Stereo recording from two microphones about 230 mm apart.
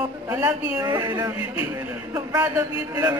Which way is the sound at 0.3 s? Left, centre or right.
Centre.